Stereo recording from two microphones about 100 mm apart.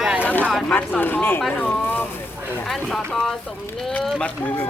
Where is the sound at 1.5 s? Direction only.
10° left (ahead or behind).